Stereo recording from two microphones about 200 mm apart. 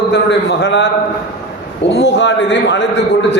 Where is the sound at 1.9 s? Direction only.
60° left (ahead or behind).